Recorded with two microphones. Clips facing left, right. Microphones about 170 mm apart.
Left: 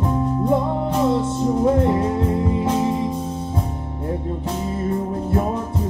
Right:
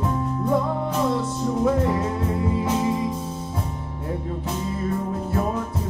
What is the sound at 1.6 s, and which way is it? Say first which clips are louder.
Music: left 3 dB; 30° left (ahead or behind).